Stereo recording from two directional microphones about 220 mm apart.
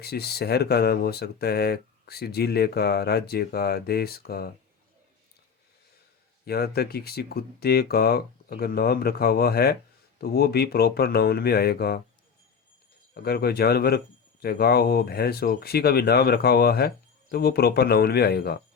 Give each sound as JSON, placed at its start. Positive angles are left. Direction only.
{"t": 0.0, "sound": "speech", "side_deg": 45}
{"t": 6.4, "sound": "speech", "side_deg": 45}
{"t": 13.1, "sound": "speech", "side_deg": 45}